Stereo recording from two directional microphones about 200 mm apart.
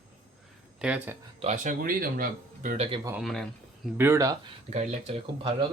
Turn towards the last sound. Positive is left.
turn(degrees=-30)  # may be behind; listen again after turning